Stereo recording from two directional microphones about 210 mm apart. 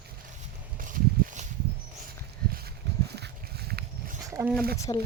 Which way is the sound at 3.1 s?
50° right (ahead or behind).